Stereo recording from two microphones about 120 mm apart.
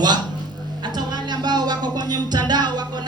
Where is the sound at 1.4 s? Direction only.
35° right (ahead or behind).